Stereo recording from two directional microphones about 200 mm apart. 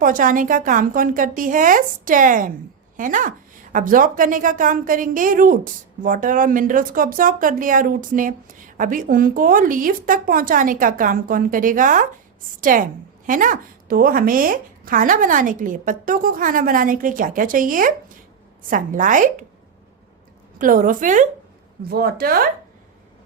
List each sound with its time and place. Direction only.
0.0 s a woman's voice: 45° right (ahead or behind)
20.6 s a woman's voice: 45° right (ahead or behind)